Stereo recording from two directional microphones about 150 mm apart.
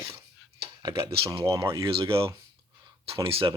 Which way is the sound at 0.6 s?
30° right (ahead or behind).